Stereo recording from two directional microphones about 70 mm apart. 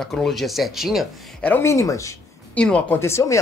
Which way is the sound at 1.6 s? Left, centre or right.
Left.